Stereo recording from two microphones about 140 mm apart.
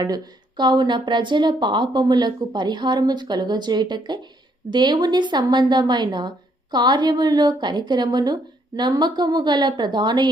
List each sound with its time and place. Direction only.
0.0 s a woman's voice: 30° right (ahead or behind)